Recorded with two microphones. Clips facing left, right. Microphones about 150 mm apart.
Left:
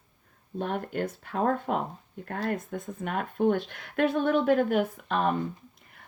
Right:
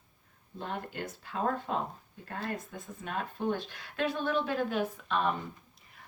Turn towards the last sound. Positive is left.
turn(degrees=45)  # may be behind; listen again after turning